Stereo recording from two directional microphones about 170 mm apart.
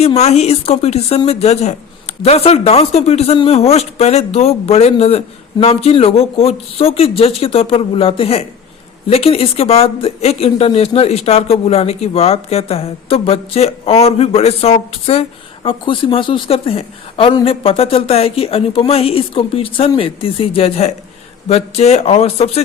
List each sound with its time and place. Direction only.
0.0 s speech: 40° left (ahead or behind)